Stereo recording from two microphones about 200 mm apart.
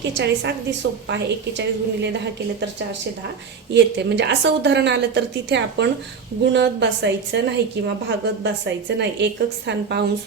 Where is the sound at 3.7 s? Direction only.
60° right (ahead or behind).